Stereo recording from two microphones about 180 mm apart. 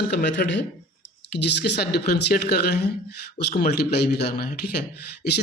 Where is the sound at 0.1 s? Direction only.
80° left.